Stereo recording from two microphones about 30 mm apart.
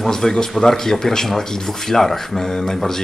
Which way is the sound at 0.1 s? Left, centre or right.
Centre.